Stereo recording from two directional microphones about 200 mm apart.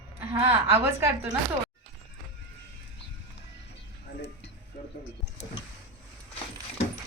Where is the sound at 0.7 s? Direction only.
10° right (ahead or behind).